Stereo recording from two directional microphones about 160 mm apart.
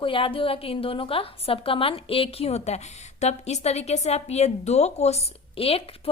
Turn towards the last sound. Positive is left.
turn(degrees=35)  # may be behind; listen again after turning